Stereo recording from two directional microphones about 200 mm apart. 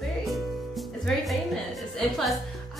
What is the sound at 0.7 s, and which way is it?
Music, centre (ahead or behind).